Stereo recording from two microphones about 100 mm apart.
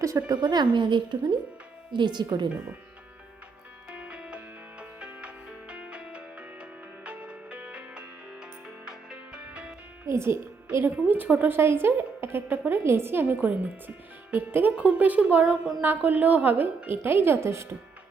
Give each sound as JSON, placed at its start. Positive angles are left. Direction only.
{"t": 0.4, "sound": "a woman's voice", "side_deg": -45}
{"t": 3.8, "sound": "music", "side_deg": -10}
{"t": 10.1, "sound": "a woman's voice", "side_deg": -25}